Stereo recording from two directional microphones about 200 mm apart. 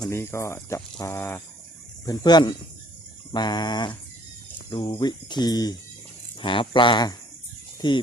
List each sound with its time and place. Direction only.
0.1 s speech: 15° left (ahead or behind)